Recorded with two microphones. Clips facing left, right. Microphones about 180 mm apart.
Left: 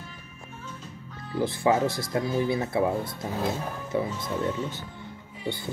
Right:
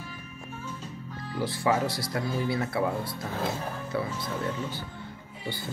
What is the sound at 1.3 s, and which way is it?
Speech, 25° left (ahead or behind).